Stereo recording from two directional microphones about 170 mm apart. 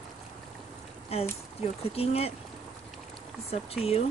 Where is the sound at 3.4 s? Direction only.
35° left (ahead or behind).